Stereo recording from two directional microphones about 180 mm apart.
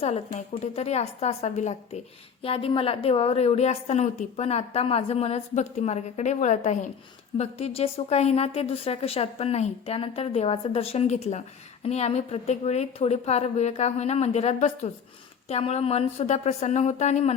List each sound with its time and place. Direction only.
0.0 s a woman's voice: 40° left (ahead or behind)